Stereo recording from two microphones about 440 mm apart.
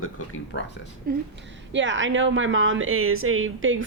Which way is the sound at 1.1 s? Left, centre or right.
Centre.